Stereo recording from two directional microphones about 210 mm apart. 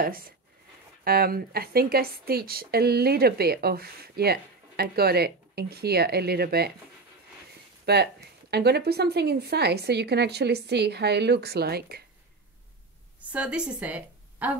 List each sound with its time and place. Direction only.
0.0 s a woman's voice: 45° right (ahead or behind)
7.8 s a woman's voice: 50° right (ahead or behind)
13.3 s a woman's voice: 5° right (ahead or behind)